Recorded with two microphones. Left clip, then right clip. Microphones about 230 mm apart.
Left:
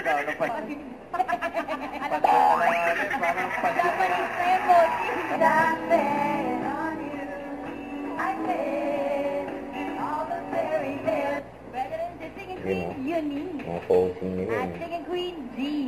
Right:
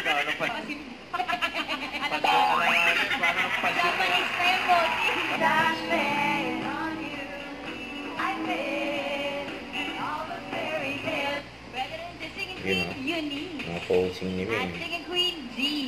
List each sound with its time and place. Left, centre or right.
0.0 s a man's voice: centre
1.1 s music: centre
8.2 s music: centre
13.9 s speech: right